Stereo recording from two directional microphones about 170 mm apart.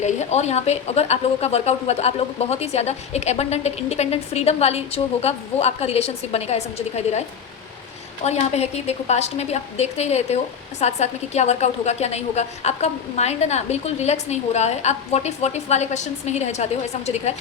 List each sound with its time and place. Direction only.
0.0 s a woman's voice: 40° left (ahead or behind)
8.2 s a woman's voice: 40° left (ahead or behind)